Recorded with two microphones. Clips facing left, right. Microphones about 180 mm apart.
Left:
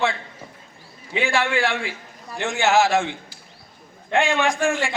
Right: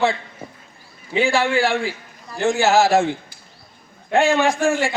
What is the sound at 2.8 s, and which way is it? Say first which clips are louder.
A man's voice: right 4 dB; 40° right (ahead or behind).